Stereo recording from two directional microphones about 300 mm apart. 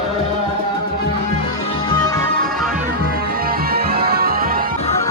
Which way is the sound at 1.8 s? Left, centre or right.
Centre.